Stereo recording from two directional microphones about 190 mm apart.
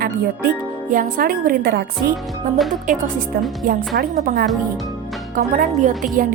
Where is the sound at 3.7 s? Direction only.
50° right (ahead or behind).